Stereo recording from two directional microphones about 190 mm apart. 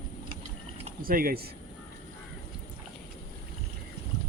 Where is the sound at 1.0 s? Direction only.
50° right (ahead or behind).